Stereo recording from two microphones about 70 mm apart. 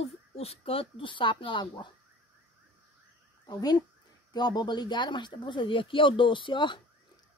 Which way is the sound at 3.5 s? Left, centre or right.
Left.